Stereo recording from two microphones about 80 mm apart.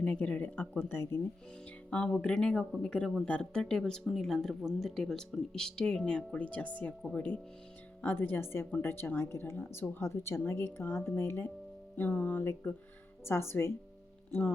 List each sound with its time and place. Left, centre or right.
0.0 s speech: centre
7.0 s speech: centre
8.0 s a woman's voice: left